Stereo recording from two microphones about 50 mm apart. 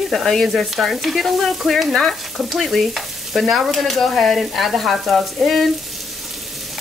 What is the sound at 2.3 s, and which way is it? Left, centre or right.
Stir, centre.